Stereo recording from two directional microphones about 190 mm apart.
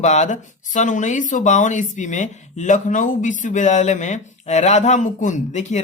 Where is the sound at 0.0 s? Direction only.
40° left (ahead or behind).